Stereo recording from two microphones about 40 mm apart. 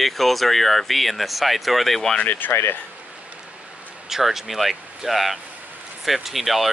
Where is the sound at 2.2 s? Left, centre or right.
Left.